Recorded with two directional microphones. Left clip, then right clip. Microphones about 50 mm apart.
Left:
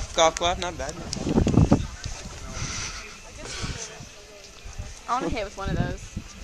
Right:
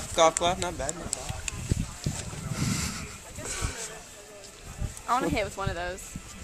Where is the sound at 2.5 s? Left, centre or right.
Right.